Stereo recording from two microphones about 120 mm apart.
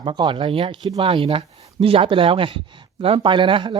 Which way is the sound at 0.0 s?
40° right (ahead or behind).